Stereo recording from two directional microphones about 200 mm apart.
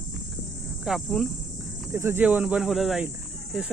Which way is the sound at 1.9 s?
10° right (ahead or behind).